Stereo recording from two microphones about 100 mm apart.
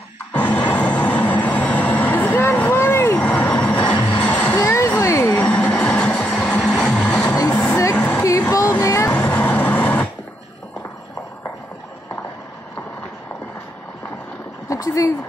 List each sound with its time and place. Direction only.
0.3 s vehicle: 15° left (ahead or behind)
3.2 s a sound: 10° left (ahead or behind)
4.2 s music: 15° left (ahead or behind)
4.6 s music: 30° left (ahead or behind); by 7.3 s 10° left (ahead or behind)
7.5 s vehicle: 25° left (ahead or behind)
7.9 s a sound: 10° left (ahead or behind)
8.2 s a sound: 30° left (ahead or behind)
9.1 s vehicle: 15° left (ahead or behind)
14.7 s vehicle: 35° left (ahead or behind)